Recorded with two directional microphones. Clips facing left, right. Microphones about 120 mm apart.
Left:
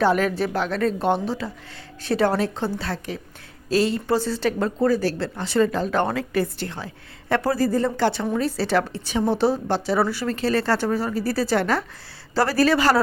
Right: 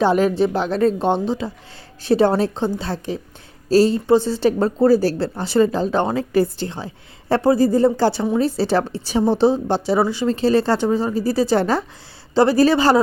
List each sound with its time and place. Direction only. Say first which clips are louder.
0.0 s speech: right 4 dB; 30° right (ahead or behind)